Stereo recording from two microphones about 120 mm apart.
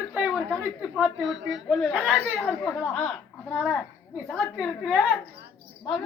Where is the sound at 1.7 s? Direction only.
5° left (ahead or behind).